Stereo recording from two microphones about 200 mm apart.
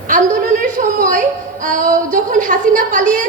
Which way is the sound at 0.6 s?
40° right (ahead or behind).